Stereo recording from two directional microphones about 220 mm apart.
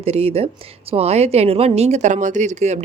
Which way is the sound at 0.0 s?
25° right (ahead or behind).